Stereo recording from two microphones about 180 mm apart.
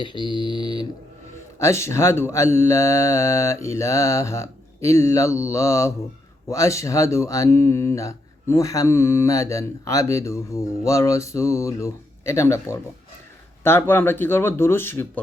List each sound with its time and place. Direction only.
0.0 s speech: 25° left (ahead or behind)